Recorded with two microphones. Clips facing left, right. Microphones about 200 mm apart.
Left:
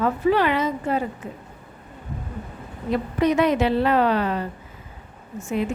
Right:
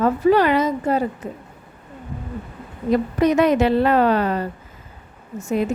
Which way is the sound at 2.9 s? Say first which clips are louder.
Right 3 dB; 45° right (ahead or behind).